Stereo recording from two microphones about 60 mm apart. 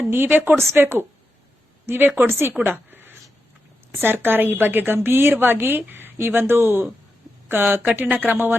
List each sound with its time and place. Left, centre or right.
0.0 s a woman's voice: right
0.5 s a woman's voice: right
2.6 s a sound: right
3.9 s a woman's voice: right